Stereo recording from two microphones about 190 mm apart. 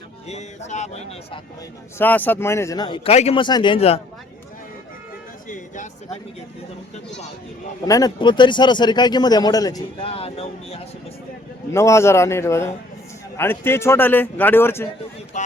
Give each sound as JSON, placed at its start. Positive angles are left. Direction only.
{"t": 0.3, "sound": "speech", "side_deg": 35}
{"t": 2.0, "sound": "speech", "side_deg": 10}
{"t": 5.5, "sound": "music", "side_deg": 40}
{"t": 7.9, "sound": "speech", "side_deg": 20}
{"t": 11.7, "sound": "a man's voice", "side_deg": 15}
{"t": 15.3, "sound": "speech", "side_deg": 40}